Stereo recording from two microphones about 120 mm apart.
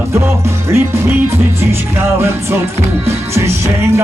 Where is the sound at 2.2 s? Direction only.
20° right (ahead or behind).